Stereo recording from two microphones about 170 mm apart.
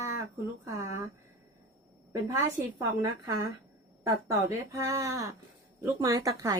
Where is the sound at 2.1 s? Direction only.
20° right (ahead or behind).